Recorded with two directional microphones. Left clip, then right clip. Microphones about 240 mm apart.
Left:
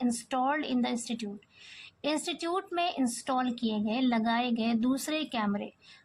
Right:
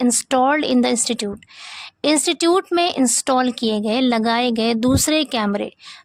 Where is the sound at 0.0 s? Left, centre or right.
Right.